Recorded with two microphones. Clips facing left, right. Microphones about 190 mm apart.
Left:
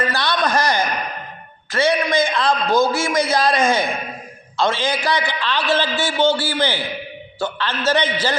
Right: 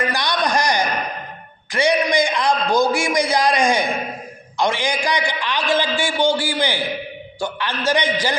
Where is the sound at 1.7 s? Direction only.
15° right (ahead or behind).